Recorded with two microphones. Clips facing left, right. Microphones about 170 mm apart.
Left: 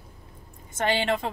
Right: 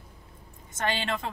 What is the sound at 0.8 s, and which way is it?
Speech, 15° left (ahead or behind).